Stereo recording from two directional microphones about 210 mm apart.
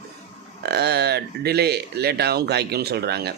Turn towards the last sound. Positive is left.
turn(degrees=-50)  # may be behind; listen again after turning